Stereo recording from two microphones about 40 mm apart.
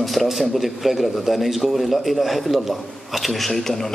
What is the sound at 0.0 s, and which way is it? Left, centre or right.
A man's voice, centre.